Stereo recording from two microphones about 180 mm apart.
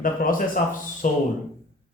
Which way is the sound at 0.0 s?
50° left (ahead or behind).